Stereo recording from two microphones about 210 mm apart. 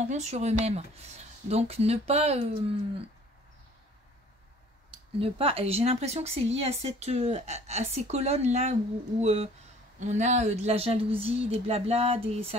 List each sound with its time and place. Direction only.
0.0 s speech: 35° right (ahead or behind)
5.2 s speech: 25° right (ahead or behind)